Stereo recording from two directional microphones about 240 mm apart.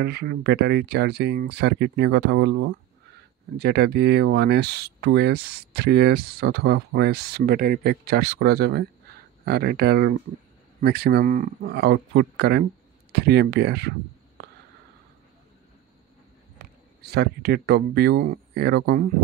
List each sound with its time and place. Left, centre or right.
0.0 s speech: right
16.5 s speech: right